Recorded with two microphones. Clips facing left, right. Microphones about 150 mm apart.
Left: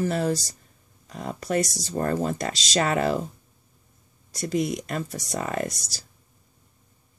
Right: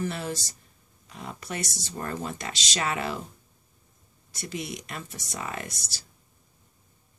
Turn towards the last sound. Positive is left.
turn(degrees=40)  # may be behind; listen again after turning